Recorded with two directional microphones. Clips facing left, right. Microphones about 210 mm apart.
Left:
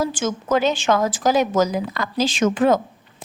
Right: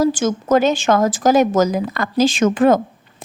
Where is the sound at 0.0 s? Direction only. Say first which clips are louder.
Right 6 dB; 40° right (ahead or behind).